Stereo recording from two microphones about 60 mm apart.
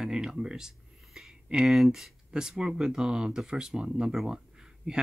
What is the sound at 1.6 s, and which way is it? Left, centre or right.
Speech, centre.